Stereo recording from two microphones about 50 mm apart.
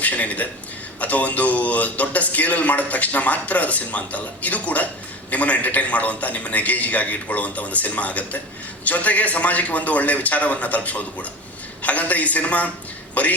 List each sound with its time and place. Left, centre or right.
0.0 s a man's voice: left